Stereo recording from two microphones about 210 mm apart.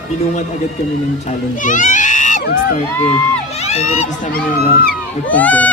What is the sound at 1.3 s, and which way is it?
Speech, 40° left (ahead or behind).